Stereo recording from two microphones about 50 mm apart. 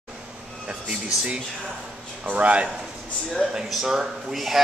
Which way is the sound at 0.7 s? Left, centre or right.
Right.